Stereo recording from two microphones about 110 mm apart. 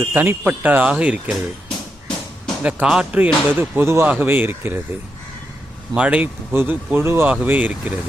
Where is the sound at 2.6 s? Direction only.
15° right (ahead or behind).